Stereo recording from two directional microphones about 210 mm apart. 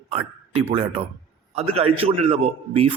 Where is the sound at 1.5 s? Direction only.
30° right (ahead or behind).